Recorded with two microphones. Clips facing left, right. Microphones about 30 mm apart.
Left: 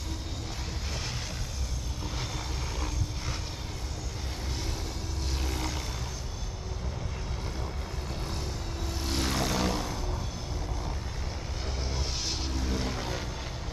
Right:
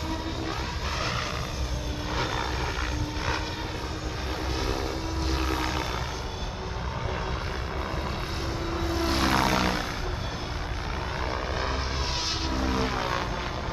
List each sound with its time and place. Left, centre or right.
5.4 s vehicle: right
8.8 s vehicle: right
12.4 s vehicle: right